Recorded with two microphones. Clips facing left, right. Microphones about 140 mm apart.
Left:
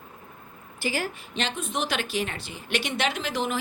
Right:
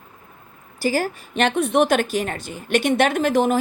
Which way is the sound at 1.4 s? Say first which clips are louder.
Right 12 dB; 65° right (ahead or behind).